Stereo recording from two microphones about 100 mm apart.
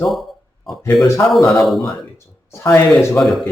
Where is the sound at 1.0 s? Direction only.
30° left (ahead or behind).